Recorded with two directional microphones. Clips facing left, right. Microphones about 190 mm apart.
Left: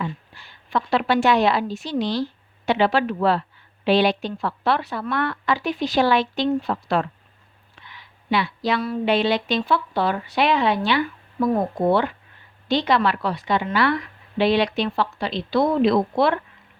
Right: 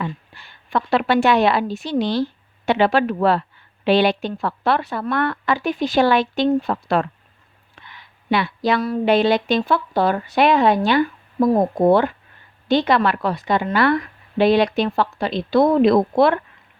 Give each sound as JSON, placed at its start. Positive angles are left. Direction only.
{"t": 0.0, "sound": "a woman's voice", "side_deg": -60}